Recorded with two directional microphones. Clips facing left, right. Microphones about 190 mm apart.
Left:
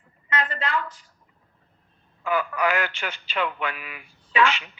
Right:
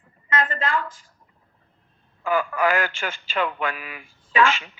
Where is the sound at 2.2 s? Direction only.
45° right (ahead or behind).